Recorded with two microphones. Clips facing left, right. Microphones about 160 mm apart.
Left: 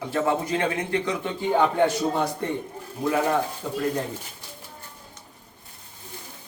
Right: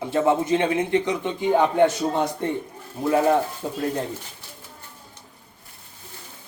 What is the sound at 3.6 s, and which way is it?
Speech, 25° right (ahead or behind).